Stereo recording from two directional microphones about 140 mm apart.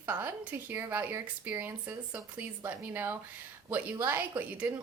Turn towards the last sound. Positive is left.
turn(degrees=-10)  # may be behind; listen again after turning